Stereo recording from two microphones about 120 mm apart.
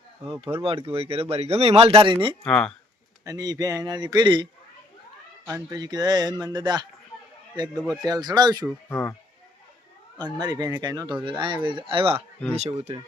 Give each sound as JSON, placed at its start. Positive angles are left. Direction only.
{"t": 0.4, "sound": "speech", "side_deg": -55}
{"t": 2.4, "sound": "speech", "side_deg": 5}
{"t": 3.2, "sound": "a man's voice", "side_deg": -30}
{"t": 5.6, "sound": "a man's voice", "side_deg": -35}
{"t": 8.0, "sound": "a man's voice", "side_deg": -35}
{"t": 8.9, "sound": "speech", "side_deg": 20}
{"t": 10.3, "sound": "speech", "side_deg": -35}
{"t": 12.5, "sound": "speech", "side_deg": -60}